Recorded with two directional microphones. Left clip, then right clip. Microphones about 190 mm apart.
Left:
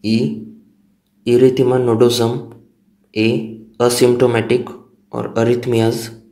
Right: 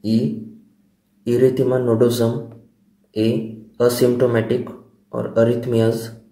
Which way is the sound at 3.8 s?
15° left (ahead or behind).